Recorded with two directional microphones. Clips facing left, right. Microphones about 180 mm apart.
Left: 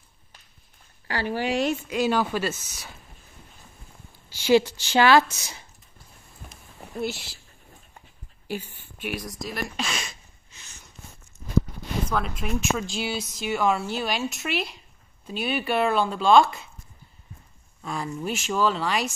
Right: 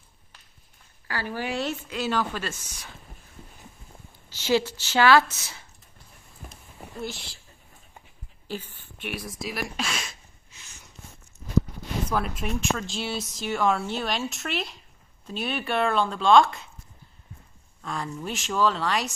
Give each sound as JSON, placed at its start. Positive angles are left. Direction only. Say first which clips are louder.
{"t": 1.0, "sound": "a woman's voice", "louder": "left 4 dB", "side_deg": 20}
{"t": 4.3, "sound": "a woman's voice", "louder": "left 4 dB", "side_deg": 15}
{"t": 7.0, "sound": "a woman's voice", "louder": "left 5 dB", "side_deg": 5}
{"t": 8.5, "sound": "speech", "louder": "left 2 dB", "side_deg": 10}
{"t": 9.5, "sound": "a sound", "louder": "even", "side_deg": -5}
{"t": 12.1, "sound": "speech", "louder": "even", "side_deg": -5}
{"t": 17.8, "sound": "speech", "louder": "left 3 dB", "side_deg": 5}